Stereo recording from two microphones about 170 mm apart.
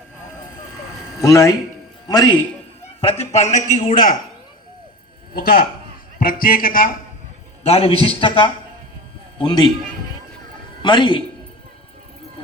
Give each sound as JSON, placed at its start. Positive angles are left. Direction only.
{"t": 1.2, "sound": "speech", "side_deg": 20}
{"t": 3.0, "sound": "a man's voice", "side_deg": 35}
{"t": 5.3, "sound": "a man's voice", "side_deg": 65}
{"t": 7.6, "sound": "speech", "side_deg": 35}
{"t": 10.8, "sound": "speech", "side_deg": 30}